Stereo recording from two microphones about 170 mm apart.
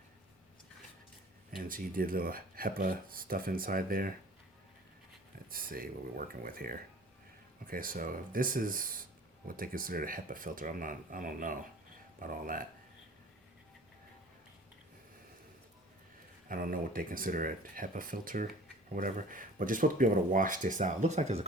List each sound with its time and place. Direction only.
1.5 s speech: 55° right (ahead or behind)
5.5 s speech: 60° right (ahead or behind)
16.5 s speech: 55° right (ahead or behind)